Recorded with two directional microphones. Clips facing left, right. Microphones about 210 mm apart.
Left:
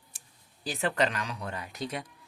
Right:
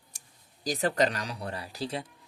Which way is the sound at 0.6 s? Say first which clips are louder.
Right 2 dB; 40° right (ahead or behind).